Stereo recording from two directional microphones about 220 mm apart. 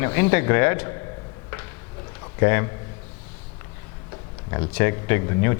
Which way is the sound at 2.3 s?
15° left (ahead or behind).